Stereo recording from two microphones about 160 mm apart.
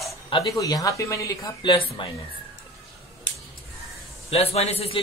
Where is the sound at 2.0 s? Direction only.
30° left (ahead or behind).